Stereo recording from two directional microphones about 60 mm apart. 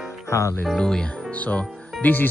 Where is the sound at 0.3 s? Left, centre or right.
Left.